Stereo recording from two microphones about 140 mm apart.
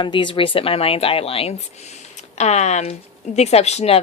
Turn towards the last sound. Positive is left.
turn(degrees=50)  # may be behind; listen again after turning